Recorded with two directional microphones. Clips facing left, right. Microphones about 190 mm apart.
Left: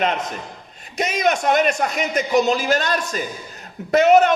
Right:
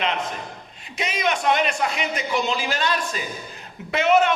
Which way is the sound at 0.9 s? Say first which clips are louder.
Left 5 dB; 45° left (ahead or behind).